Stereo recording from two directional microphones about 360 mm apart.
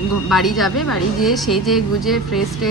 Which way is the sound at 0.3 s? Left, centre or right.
Centre.